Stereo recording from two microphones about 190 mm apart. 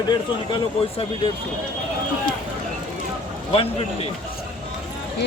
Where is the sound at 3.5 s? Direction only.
30° left (ahead or behind).